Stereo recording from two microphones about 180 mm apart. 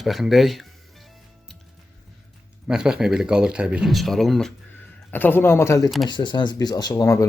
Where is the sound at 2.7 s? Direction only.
5° right (ahead or behind).